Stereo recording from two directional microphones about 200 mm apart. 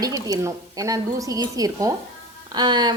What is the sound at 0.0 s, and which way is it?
A woman's voice, 20° right (ahead or behind).